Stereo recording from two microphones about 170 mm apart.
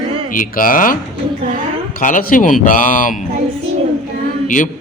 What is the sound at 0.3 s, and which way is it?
Speech, 55° left (ahead or behind).